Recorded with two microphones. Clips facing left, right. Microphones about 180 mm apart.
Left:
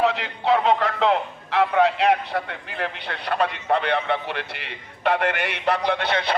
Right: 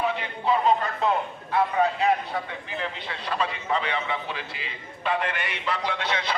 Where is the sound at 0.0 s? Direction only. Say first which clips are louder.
Left 4 dB; 85° left.